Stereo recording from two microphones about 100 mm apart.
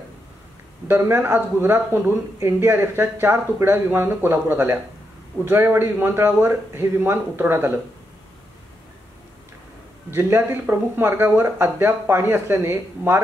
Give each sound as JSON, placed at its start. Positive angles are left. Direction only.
{"t": 0.8, "sound": "speech", "side_deg": -20}
{"t": 10.1, "sound": "speech", "side_deg": -25}